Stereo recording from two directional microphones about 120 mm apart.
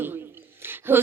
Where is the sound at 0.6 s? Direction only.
20° right (ahead or behind).